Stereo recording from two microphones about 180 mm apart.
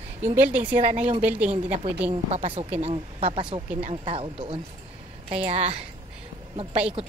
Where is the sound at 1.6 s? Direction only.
35° right (ahead or behind).